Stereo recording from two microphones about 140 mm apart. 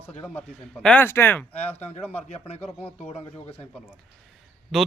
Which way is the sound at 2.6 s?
10° left (ahead or behind).